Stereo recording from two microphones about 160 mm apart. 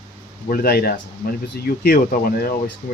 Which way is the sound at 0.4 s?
65° left (ahead or behind).